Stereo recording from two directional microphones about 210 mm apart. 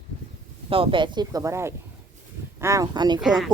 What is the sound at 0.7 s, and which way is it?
A woman's voice, 25° right (ahead or behind).